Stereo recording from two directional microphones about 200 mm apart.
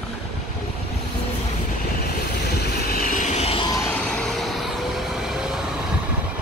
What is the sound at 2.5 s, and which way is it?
Vehicle, 55° left (ahead or behind).